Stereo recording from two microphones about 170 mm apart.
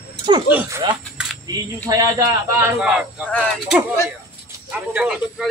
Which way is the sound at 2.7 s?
5° right (ahead or behind).